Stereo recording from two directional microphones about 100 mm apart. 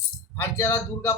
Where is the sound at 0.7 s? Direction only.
25° left (ahead or behind).